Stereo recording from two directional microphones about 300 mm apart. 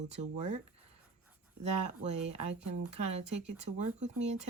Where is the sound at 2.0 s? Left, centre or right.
Right.